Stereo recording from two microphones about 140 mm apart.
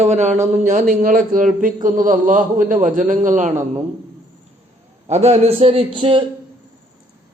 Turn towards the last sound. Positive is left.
turn(degrees=-40)  # may be behind; listen again after turning